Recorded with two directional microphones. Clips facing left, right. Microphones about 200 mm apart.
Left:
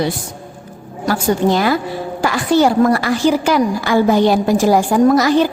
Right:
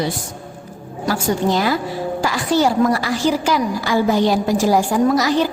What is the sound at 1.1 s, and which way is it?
A woman's voice, 55° left (ahead or behind).